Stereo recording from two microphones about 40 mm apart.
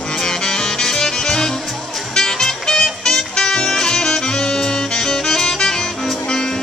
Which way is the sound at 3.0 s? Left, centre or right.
Centre.